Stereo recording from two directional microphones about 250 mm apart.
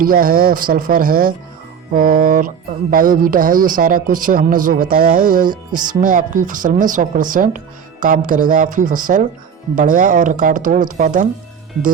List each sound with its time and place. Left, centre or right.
0.0 s a man's voice: right